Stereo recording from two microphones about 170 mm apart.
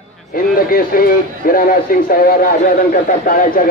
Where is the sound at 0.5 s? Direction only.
55° left (ahead or behind).